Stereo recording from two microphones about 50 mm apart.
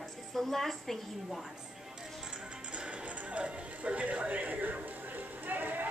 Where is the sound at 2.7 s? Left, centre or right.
Right.